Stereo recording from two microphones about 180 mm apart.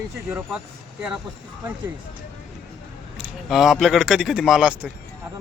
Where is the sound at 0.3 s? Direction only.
5° right (ahead or behind).